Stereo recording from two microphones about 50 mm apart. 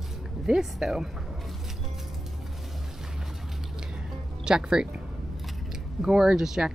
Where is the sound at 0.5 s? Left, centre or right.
Centre.